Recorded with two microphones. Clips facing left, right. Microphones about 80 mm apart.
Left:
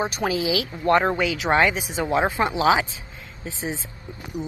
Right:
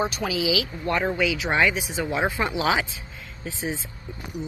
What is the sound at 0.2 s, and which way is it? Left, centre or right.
Speech, left.